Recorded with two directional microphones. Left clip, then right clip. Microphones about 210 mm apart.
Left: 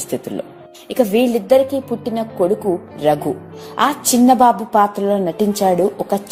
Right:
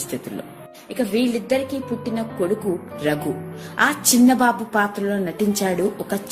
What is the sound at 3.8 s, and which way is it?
A woman's voice, 25° left (ahead or behind).